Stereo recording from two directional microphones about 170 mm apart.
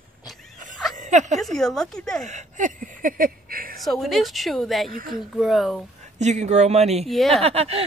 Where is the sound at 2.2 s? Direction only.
45° right (ahead or behind).